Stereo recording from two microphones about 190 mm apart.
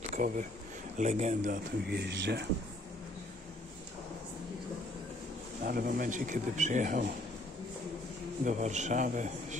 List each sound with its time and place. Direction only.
0.1 s a man's voice: 40° right (ahead or behind)
1.9 s speech: 60° right (ahead or behind)
5.6 s a man's voice: 50° right (ahead or behind)
8.5 s a man's voice: 40° right (ahead or behind)